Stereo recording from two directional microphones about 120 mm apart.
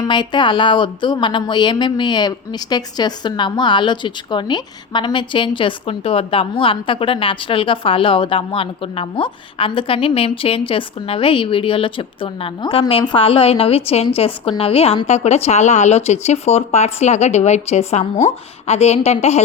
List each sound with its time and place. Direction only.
0.0 s a woman's voice: 40° left (ahead or behind); by 19.4 s 65° left (ahead or behind)